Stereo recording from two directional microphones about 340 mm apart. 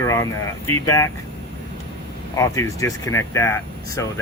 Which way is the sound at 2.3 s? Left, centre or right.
Centre.